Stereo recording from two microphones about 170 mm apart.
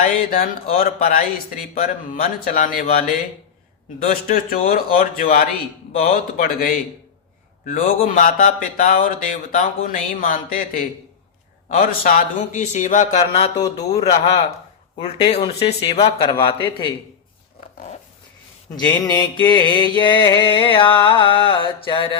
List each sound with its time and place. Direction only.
0.0 s speech: 55° left (ahead or behind)
4.1 s speech: 55° left (ahead or behind)
7.6 s a sound: 55° left (ahead or behind); by 13.5 s 40° left (ahead or behind)
13.6 s mantra: 20° left (ahead or behind)
14.0 s mantra: 35° left (ahead or behind)
19.0 s mantra: 25° left (ahead or behind)